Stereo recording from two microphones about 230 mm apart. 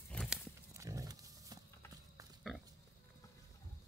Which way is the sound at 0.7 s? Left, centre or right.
Centre.